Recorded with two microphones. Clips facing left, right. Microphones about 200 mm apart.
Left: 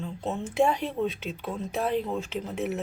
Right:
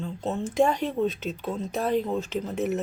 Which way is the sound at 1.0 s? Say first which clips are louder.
Right 3 dB; 40° right (ahead or behind).